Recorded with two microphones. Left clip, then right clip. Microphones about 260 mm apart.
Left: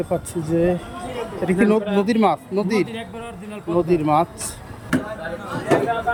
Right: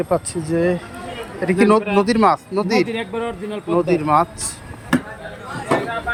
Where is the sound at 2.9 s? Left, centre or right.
Right.